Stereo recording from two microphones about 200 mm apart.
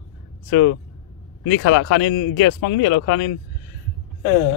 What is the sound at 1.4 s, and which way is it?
Speech, 85° left.